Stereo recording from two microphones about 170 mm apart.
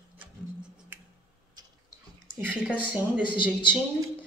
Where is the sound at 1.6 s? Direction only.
25° right (ahead or behind).